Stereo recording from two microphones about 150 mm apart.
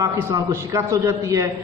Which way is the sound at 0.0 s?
20° right (ahead or behind).